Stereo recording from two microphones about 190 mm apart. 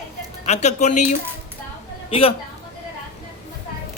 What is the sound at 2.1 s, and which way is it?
Speech, 30° left (ahead or behind).